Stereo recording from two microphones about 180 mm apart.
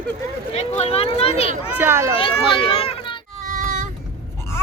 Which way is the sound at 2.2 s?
30° left (ahead or behind).